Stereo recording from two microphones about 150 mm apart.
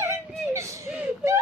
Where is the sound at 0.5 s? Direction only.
20° right (ahead or behind).